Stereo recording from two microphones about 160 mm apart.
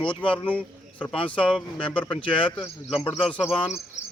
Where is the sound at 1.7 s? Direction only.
30° left (ahead or behind).